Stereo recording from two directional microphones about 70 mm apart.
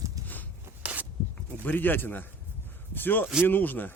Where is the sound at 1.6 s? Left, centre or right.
Left.